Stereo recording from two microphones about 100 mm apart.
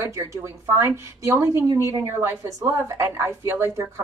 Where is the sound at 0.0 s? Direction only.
30° right (ahead or behind).